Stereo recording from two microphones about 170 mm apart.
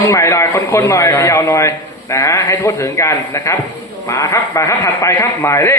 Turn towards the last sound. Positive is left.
turn(degrees=15)  # may be behind; listen again after turning